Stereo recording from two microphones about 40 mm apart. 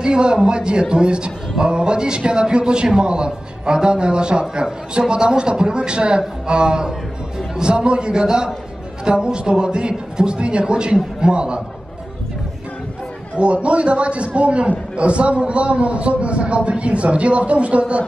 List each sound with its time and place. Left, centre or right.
0.0 s a man's voice: right
13.4 s a man's voice: right